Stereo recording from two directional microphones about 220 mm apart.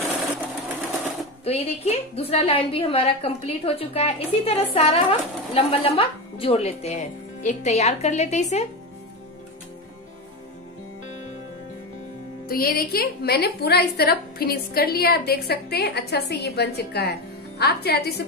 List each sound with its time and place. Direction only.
1.4 s a woman's voice: 30° left (ahead or behind)
12.4 s a woman's voice: 40° left (ahead or behind)